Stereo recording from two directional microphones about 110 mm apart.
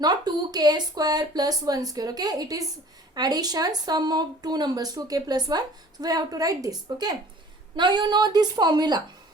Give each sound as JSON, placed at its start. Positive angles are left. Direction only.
{"t": 0.0, "sound": "speech", "side_deg": -40}